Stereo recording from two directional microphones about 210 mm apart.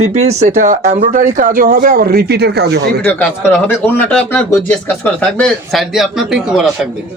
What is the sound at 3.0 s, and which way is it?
Speech, 10° left (ahead or behind).